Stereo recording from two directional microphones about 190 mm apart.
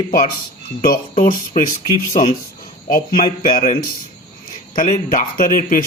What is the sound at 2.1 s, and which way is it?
Speech, 30° left (ahead or behind).